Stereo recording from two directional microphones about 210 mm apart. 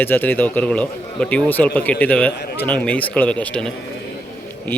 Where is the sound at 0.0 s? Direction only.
10° left (ahead or behind).